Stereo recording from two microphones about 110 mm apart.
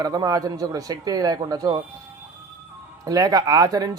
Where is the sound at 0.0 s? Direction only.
35° right (ahead or behind).